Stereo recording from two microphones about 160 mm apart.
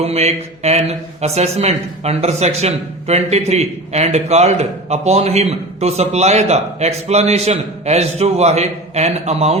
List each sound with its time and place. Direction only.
0.0 s a man's voice: 40° right (ahead or behind)